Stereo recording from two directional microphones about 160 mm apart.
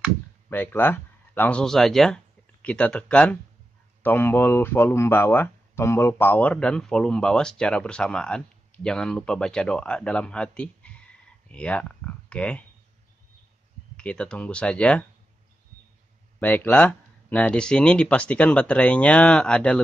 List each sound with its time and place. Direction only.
0.5 s speech: 10° left (ahead or behind)
13.9 s speech: 5° left (ahead or behind)
16.3 s speech: 10° left (ahead or behind)